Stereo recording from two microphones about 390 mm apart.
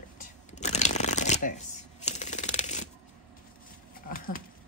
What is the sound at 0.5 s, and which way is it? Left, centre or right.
Shuffling cards, centre.